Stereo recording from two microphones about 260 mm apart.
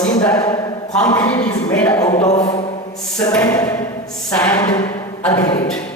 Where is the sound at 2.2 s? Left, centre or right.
Left.